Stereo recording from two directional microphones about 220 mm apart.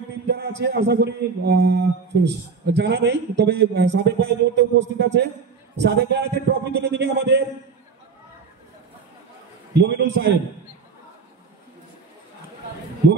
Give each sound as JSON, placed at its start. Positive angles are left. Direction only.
{"t": 0.6, "sound": "a man's voice", "side_deg": -50}
{"t": 9.8, "sound": "a man's voice", "side_deg": -50}
{"t": 13.0, "sound": "speech", "side_deg": -50}